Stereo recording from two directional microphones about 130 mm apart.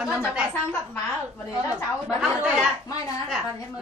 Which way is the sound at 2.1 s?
5° right (ahead or behind).